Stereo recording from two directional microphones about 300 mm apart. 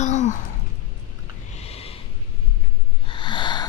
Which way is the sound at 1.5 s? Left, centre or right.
Left.